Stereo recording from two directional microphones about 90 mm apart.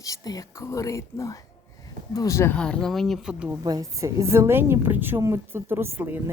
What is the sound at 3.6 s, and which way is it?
A woman's voice, 45° right (ahead or behind).